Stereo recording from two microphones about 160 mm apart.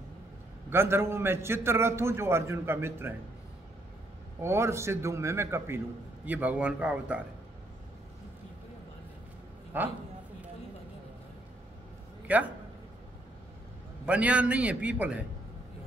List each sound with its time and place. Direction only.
0.7 s a man's voice: 15° right (ahead or behind)
4.4 s a man's voice: 15° right (ahead or behind)
9.7 s a man's voice: 10° right (ahead or behind)
12.3 s a man's voice: 10° right (ahead or behind)
14.0 s a man's voice: 10° right (ahead or behind)